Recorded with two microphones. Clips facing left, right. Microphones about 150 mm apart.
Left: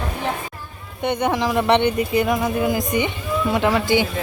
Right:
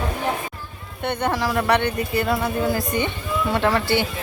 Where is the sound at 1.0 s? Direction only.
15° left (ahead or behind).